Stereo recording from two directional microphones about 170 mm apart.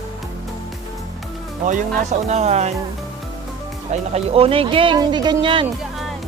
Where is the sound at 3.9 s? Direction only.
40° right (ahead or behind).